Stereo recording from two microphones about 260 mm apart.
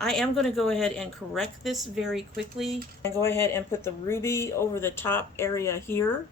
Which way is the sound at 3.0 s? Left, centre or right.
Centre.